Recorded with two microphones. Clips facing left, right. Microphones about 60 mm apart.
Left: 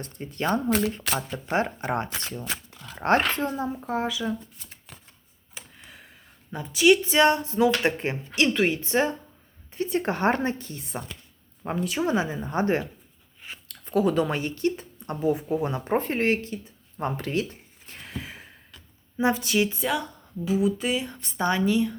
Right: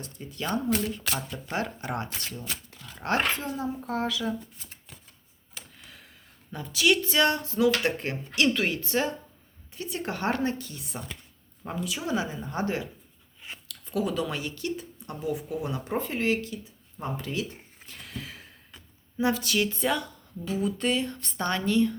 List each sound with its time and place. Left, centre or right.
0.0 s speech: left
0.7 s speech: left
0.9 s speech: left
3.8 s speech: centre
5.5 s tick: centre
6.5 s speech: centre; by 16.6 s left
17.0 s speech: left
17.8 s a sound: left
19.1 s speech: left
20.4 s speech: centre